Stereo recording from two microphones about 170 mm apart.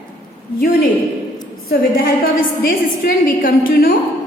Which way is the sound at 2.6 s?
55° left (ahead or behind).